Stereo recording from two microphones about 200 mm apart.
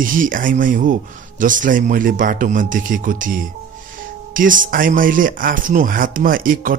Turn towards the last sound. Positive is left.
turn(degrees=-45)  # may be behind; listen again after turning